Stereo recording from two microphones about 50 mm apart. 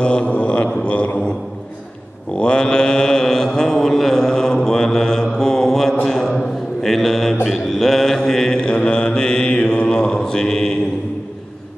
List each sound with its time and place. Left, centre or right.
0.0 s mantra: left
2.3 s mantra: centre
6.0 s a sound: centre
7.4 s mantra: centre